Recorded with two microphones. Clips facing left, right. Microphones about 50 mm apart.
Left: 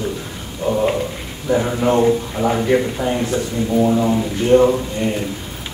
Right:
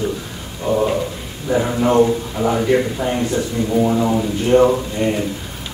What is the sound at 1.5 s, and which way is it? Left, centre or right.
A man's voice, centre.